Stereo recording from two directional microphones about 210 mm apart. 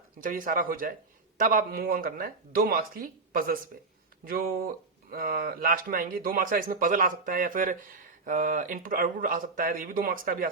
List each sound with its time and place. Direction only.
0.2 s a man's voice: 40° right (ahead or behind)